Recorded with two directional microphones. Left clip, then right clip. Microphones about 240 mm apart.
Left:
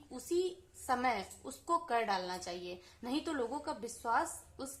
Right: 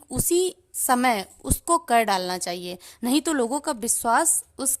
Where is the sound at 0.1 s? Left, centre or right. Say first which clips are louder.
Right 12 dB; right.